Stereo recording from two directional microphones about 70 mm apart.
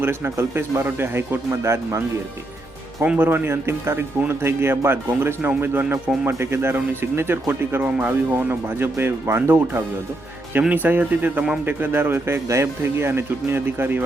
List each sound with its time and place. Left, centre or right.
0.0 s speech: right
3.0 s speech: right
10.6 s speech: right